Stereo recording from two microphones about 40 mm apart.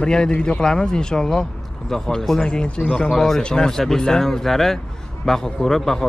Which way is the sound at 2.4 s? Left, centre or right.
Left.